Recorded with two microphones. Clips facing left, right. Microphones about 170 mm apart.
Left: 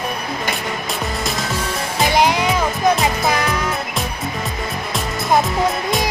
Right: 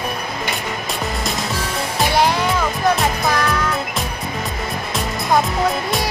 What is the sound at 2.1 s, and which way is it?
Music, 15° left (ahead or behind).